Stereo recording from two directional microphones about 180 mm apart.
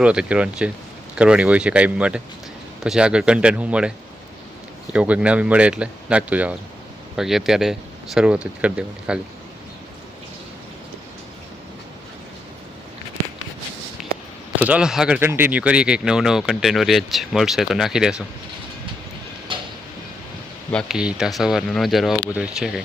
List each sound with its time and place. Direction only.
0.0 s speech: 5° right (ahead or behind)
4.9 s speech: 5° right (ahead or behind)
14.0 s a sound: centre (ahead or behind)
14.5 s speech: 10° right (ahead or behind)
19.5 s tick-tock: 25° right (ahead or behind)
20.7 s speech: centre (ahead or behind)